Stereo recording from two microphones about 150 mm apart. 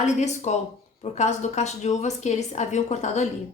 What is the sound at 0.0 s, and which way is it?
A woman's voice, 50° left (ahead or behind).